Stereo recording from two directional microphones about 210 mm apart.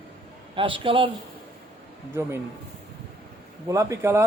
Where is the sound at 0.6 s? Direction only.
25° right (ahead or behind).